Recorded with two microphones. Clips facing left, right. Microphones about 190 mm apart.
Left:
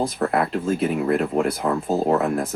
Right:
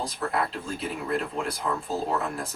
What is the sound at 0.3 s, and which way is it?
Speech, 60° left (ahead or behind).